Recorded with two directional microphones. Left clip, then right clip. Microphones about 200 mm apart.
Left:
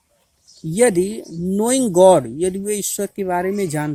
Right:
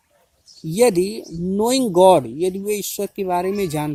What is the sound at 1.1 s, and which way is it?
Speech, 25° left (ahead or behind).